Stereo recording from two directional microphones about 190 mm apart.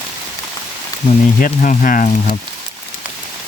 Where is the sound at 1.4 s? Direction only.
45° left (ahead or behind).